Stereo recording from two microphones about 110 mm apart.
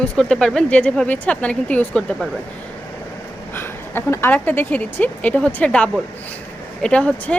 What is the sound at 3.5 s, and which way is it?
A woman's voice, 20° left (ahead or behind).